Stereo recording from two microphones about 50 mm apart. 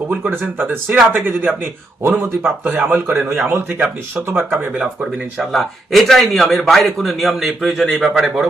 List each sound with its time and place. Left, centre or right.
0.2 s a man's voice: right
3.2 s speech: right
5.4 s a man's voice: centre